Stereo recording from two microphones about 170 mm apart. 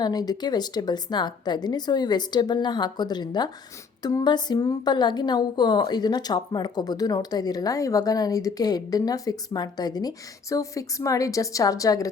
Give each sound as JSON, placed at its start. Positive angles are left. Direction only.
{"t": 0.0, "sound": "a woman's voice", "side_deg": 25}